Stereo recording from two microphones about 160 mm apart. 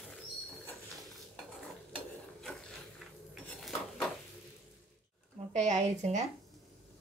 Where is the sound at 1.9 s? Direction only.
Centre (ahead or behind).